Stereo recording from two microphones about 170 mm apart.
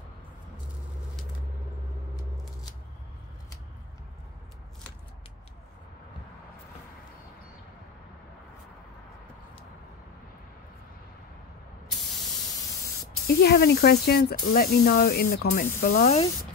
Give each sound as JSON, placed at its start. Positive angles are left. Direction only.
{"t": 13.3, "sound": "speech", "side_deg": 70}